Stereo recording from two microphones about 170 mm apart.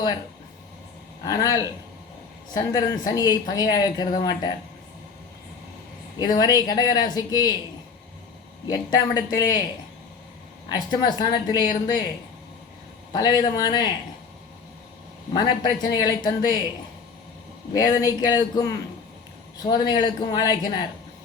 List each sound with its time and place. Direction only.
1.2 s speech: 20° left (ahead or behind)
6.1 s speech: 25° left (ahead or behind)
8.7 s speech: 20° left (ahead or behind)
10.7 s speech: 25° left (ahead or behind)
13.1 s speech: 25° left (ahead or behind)
15.3 s speech: 25° left (ahead or behind)
17.7 s speech: 20° left (ahead or behind)